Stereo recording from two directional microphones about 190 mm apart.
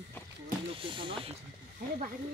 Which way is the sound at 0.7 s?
25° right (ahead or behind).